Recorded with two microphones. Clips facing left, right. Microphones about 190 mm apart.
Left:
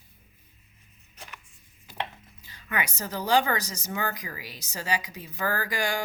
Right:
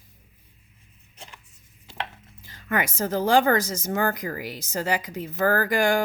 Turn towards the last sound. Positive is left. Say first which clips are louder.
# right 8 dB
turn(degrees=-55)  # may be behind; listen again after turning